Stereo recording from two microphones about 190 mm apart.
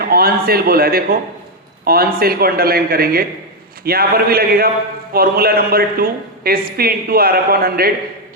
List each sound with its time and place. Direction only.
0.0 s a man's voice: 50° right (ahead or behind)